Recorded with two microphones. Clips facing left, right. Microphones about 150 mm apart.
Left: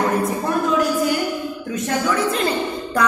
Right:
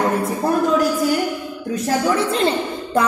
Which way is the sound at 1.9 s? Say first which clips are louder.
Right 2 dB; 30° right (ahead or behind).